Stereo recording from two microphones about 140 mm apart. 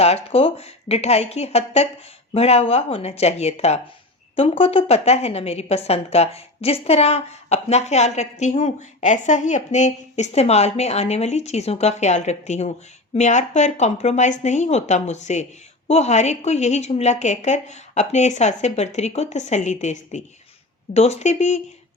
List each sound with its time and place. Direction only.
0.0 s a woman's voice: 50° left (ahead or behind)